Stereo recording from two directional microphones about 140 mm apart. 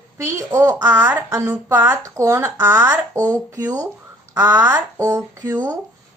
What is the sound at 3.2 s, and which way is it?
Speech, 25° right (ahead or behind).